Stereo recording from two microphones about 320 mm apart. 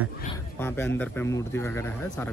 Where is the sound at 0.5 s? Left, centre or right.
Centre.